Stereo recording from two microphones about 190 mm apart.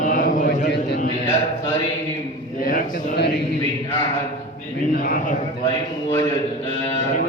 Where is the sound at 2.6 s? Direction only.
55° left (ahead or behind).